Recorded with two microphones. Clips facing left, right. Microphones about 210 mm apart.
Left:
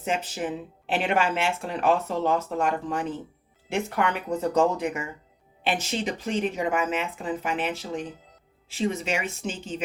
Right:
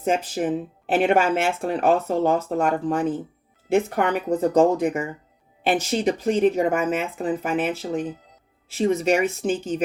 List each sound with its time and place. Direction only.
0.0 s speech: 45° right (ahead or behind)